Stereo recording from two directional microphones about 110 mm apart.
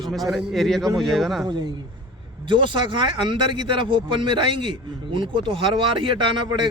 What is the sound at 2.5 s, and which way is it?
Speech, 50° right (ahead or behind).